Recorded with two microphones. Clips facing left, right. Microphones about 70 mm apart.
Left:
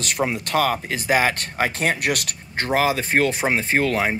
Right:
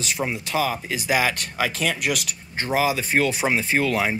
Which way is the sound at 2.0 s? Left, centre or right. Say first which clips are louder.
Left 2 dB; left.